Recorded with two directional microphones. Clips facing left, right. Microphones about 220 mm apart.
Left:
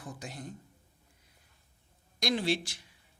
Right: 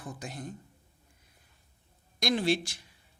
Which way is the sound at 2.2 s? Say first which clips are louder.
Right 2 dB; 50° right (ahead or behind).